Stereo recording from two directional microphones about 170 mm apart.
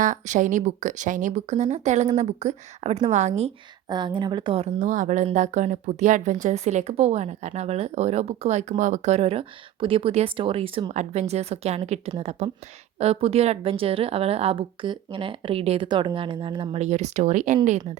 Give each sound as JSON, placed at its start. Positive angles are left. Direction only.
{"t": 0.0, "sound": "speech", "side_deg": -50}
{"t": 3.8, "sound": "speech", "side_deg": -25}
{"t": 16.8, "sound": "speech", "side_deg": -45}